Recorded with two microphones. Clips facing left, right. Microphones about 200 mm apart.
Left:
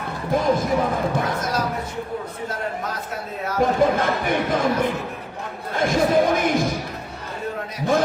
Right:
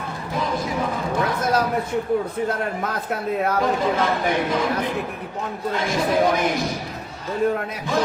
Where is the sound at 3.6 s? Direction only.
50° left (ahead or behind).